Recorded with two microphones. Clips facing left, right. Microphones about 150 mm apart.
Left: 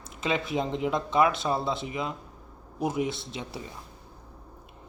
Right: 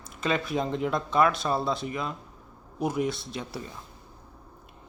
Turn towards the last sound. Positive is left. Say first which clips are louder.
# right 1 dB
turn(degrees=20)  # may be behind; listen again after turning